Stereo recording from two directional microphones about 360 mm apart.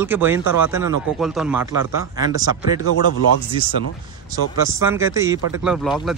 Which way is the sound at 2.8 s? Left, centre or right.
Left.